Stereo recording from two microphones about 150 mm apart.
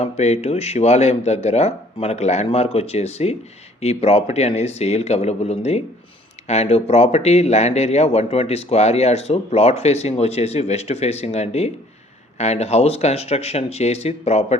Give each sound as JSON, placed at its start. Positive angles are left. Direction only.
{"t": 0.0, "sound": "a man's voice", "side_deg": 45}